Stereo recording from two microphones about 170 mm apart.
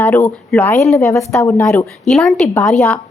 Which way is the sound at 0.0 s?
15° left (ahead or behind).